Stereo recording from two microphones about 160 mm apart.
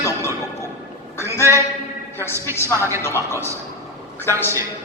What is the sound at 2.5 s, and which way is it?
Speech, 15° right (ahead or behind).